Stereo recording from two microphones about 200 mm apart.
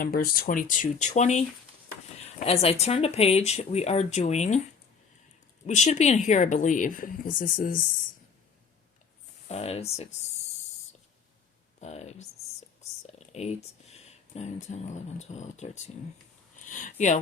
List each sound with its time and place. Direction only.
0.0 s speech: 45° left (ahead or behind)
5.6 s speech: 35° left (ahead or behind)
9.5 s speech: 30° left (ahead or behind)
11.8 s a sound: 35° left (ahead or behind)
13.1 s speech: 35° left (ahead or behind)